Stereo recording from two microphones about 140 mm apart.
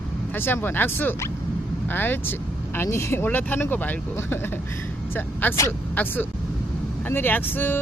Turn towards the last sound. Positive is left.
turn(degrees=15)  # may be behind; listen again after turning